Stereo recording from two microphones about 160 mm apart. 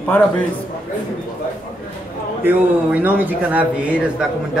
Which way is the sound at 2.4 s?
10° right (ahead or behind).